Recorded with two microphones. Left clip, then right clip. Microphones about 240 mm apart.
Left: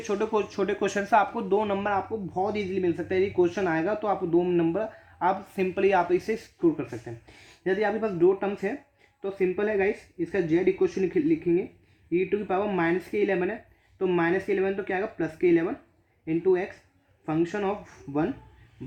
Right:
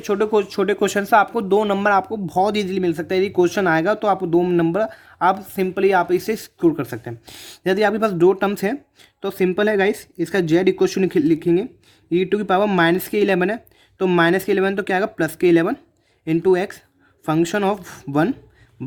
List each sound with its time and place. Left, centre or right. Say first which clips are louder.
0.0 s speech: right 8 dB; right